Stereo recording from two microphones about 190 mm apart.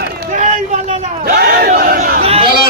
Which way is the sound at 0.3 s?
40° right (ahead or behind).